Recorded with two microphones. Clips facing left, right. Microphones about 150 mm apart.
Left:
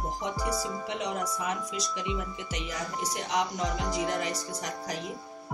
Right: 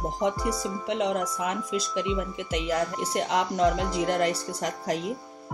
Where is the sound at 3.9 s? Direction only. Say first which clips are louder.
Right 5 dB; 65° right (ahead or behind).